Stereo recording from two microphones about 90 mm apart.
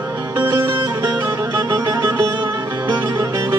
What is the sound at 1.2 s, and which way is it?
Music, 35° right (ahead or behind).